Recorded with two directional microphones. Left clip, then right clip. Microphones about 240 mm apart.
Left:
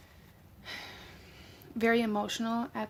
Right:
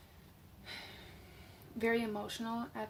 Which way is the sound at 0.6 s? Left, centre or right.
Left.